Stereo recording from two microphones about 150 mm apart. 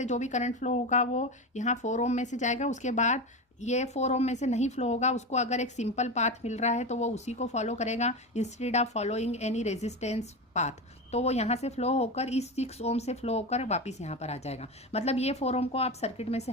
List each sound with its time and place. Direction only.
0.0 s speech: 50° left (ahead or behind)